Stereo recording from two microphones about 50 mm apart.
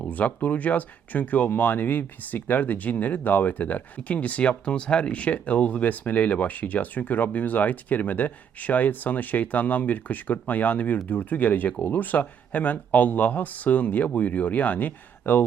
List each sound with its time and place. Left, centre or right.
0.0 s speech: left